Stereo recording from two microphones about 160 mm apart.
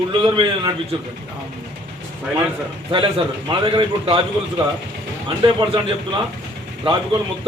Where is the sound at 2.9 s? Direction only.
30° right (ahead or behind).